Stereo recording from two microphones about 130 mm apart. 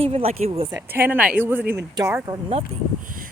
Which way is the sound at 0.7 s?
15° right (ahead or behind).